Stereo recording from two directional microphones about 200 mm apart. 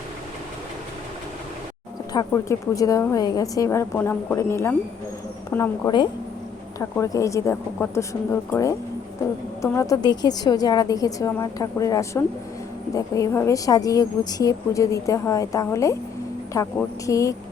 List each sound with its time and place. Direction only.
2.1 s speech: 15° left (ahead or behind)